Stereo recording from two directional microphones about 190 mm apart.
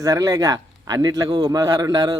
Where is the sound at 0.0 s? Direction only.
20° right (ahead or behind).